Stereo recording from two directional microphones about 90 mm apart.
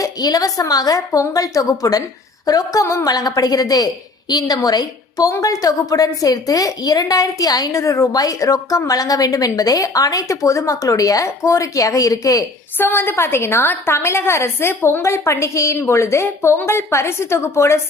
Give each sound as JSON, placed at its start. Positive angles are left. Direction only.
{"t": 0.0, "sound": "a woman's voice", "side_deg": 45}
{"t": 2.8, "sound": "a woman's voice", "side_deg": 35}
{"t": 3.1, "sound": "a woman's voice", "side_deg": 45}
{"t": 12.7, "sound": "a woman's voice", "side_deg": 25}